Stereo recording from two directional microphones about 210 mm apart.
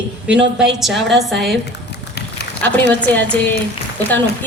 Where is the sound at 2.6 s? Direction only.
5° left (ahead or behind).